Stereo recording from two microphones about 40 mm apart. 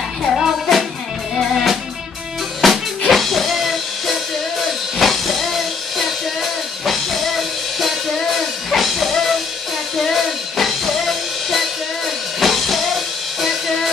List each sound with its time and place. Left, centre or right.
0.4 s music: centre